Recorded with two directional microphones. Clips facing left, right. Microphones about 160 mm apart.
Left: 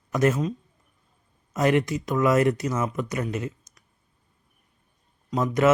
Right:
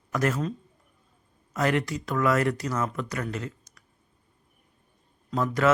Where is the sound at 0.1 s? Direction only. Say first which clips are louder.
Left 4 dB; 20° left (ahead or behind).